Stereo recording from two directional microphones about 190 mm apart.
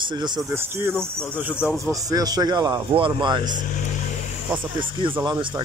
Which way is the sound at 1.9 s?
20° right (ahead or behind).